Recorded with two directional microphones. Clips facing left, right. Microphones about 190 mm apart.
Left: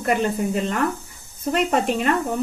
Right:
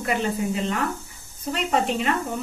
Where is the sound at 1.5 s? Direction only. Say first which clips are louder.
Left 3 dB; 50° left (ahead or behind).